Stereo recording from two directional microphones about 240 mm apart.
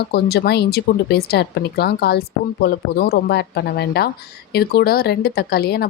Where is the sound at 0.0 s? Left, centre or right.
Left.